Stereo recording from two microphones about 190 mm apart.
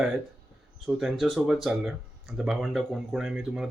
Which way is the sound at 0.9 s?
Centre (ahead or behind).